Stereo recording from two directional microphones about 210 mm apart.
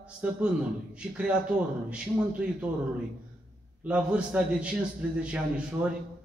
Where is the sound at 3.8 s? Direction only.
5° right (ahead or behind).